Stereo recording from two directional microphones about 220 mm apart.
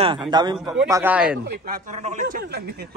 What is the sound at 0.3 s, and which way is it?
Speech, 20° right (ahead or behind).